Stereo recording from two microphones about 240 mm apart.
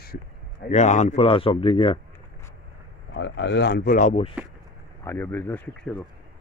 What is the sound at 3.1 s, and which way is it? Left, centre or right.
Speech, left.